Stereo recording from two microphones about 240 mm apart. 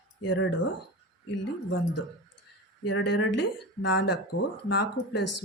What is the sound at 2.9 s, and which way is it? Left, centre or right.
Speech, left.